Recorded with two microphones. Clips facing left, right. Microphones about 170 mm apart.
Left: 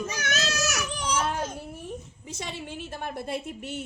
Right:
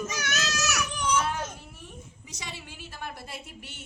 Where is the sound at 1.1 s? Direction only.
50° left (ahead or behind).